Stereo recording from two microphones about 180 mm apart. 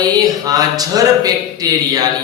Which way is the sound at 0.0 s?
20° right (ahead or behind).